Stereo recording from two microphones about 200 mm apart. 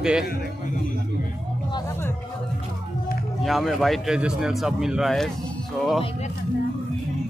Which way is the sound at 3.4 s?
Centre (ahead or behind).